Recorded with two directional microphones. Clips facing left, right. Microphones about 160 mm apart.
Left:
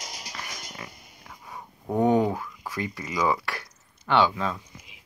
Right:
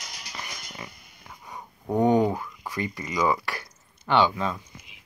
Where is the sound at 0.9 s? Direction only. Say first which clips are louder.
Left 2 dB; 35° left (ahead or behind).